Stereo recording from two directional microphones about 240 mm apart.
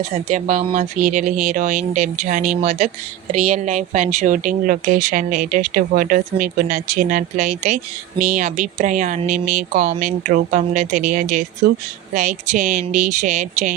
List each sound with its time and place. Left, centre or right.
0.3 s speech: right